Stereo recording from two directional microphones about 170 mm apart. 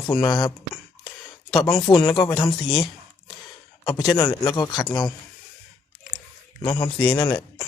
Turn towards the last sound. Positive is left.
turn(degrees=25)  # may be behind; listen again after turning